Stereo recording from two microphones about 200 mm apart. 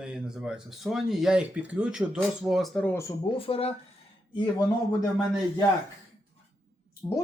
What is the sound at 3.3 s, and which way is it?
Speech, 30° left (ahead or behind).